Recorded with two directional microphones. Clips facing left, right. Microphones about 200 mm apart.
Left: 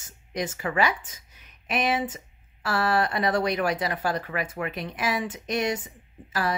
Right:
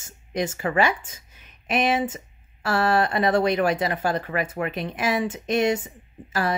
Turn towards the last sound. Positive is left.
turn(degrees=-25)  # may be behind; listen again after turning